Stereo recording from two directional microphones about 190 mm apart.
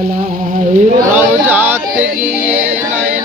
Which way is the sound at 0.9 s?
10° right (ahead or behind).